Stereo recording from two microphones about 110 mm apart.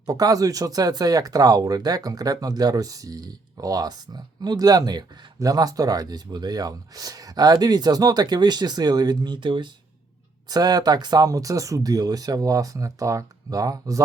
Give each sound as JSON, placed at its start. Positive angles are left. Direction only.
{"t": 0.0, "sound": "speech", "side_deg": -35}
{"t": 10.5, "sound": "speech", "side_deg": -35}